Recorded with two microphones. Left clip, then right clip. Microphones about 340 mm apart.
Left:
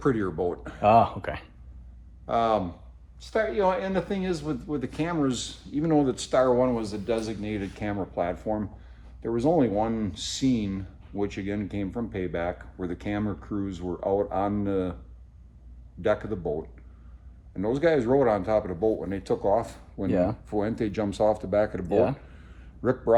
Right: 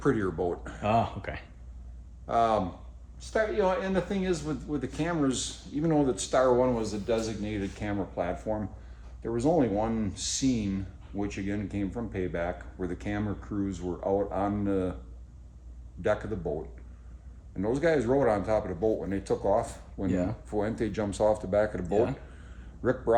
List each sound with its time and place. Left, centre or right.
0.0 s speech: centre
0.8 s speech: centre
2.2 s speech: centre
16.0 s speech: centre
17.6 s speech: centre